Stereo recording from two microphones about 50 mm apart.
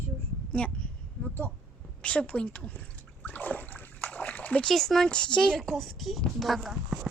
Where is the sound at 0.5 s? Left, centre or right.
Left.